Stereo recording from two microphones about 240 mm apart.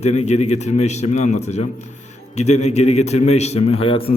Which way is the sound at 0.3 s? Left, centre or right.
Left.